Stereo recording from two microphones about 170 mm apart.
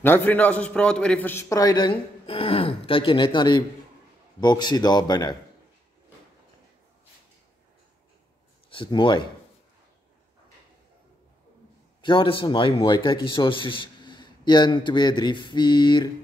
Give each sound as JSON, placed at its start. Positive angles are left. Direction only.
{"t": 0.0, "sound": "a man's voice", "side_deg": 10}
{"t": 8.6, "sound": "speech", "side_deg": 30}
{"t": 12.0, "sound": "a man's voice", "side_deg": 30}